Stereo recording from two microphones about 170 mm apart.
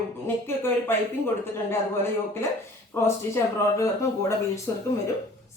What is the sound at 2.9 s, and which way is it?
Speech, 15° left (ahead or behind).